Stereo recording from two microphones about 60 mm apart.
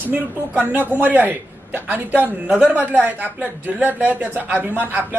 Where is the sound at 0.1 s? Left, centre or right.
Right.